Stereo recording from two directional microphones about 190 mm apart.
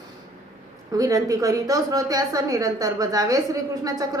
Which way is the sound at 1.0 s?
20° right (ahead or behind).